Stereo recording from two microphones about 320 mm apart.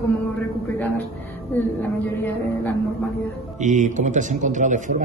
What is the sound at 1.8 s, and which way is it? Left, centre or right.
Speech, centre.